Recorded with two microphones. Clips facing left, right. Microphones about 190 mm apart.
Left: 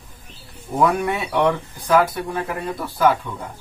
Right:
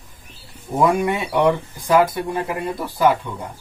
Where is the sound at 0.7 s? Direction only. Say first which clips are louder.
Right 1 dB; 5° right (ahead or behind).